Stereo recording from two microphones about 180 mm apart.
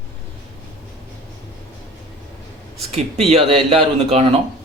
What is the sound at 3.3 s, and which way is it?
Speech, 35° right (ahead or behind).